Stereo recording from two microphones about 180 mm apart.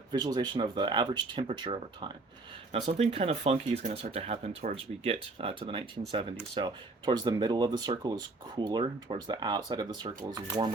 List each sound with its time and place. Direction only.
0.1 s speech: 25° right (ahead or behind)